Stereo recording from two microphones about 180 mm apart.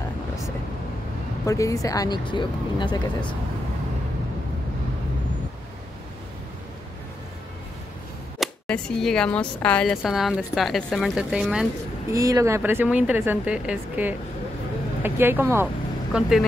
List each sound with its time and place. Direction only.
1.4 s speech: 15° left (ahead or behind)
8.4 s speech: 5° left (ahead or behind)
12.1 s a woman's voice: 20° right (ahead or behind); by 16.4 s 5° right (ahead or behind)